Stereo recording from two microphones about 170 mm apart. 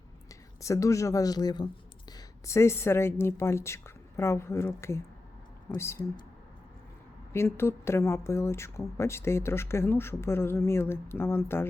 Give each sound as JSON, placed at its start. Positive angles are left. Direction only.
{"t": 0.3, "sound": "speech", "side_deg": 20}
{"t": 7.3, "sound": "speech", "side_deg": 15}